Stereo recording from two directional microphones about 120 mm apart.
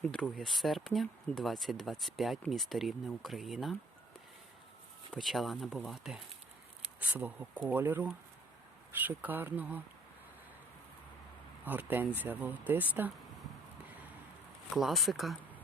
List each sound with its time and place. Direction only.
0.1 s speech: 5° left (ahead or behind)
5.1 s speech: centre (ahead or behind)
7.0 s speech: 15° right (ahead or behind)
11.6 s speech: 15° right (ahead or behind)
14.7 s speech: centre (ahead or behind)